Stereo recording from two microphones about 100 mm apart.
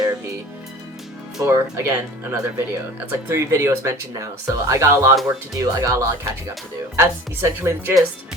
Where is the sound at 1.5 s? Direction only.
25° right (ahead or behind).